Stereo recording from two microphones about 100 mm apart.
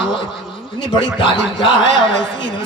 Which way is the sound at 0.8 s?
60° left (ahead or behind).